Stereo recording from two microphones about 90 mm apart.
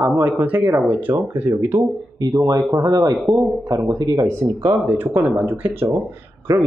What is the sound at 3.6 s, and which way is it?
Speech, 35° right (ahead or behind).